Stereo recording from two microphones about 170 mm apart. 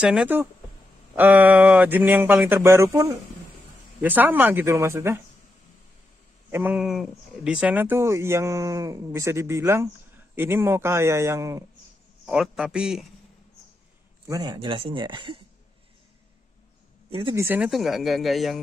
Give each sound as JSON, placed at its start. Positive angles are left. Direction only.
{"t": 0.0, "sound": "speech", "side_deg": -5}
{"t": 6.5, "sound": "speech", "side_deg": -10}
{"t": 12.3, "sound": "speech", "side_deg": -5}
{"t": 14.2, "sound": "speech", "side_deg": -20}
{"t": 17.1, "sound": "speech", "side_deg": -30}
{"t": 17.4, "sound": "speech", "side_deg": -10}
{"t": 17.6, "sound": "speech", "side_deg": 0}